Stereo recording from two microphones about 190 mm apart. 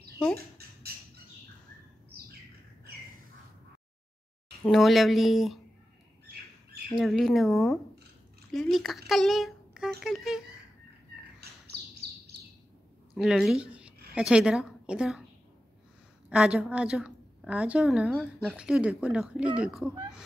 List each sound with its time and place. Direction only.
0.6 s a sound: 55° right (ahead or behind)
4.6 s a woman's voice: centre (ahead or behind)
7.0 s a woman's voice: centre (ahead or behind)
13.1 s a woman's voice: centre (ahead or behind)
16.3 s a woman's voice: 5° right (ahead or behind)